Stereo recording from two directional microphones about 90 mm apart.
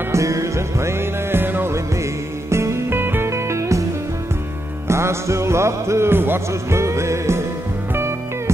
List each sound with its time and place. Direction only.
0.1 s music: 35° right (ahead or behind)
4.8 s music: 30° right (ahead or behind)